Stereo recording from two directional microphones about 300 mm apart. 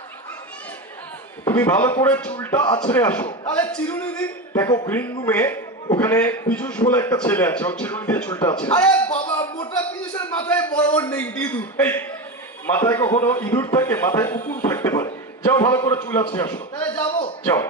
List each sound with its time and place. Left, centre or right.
1.4 s a man's voice: centre
14.6 s a sound: centre
16.3 s a man's voice: centre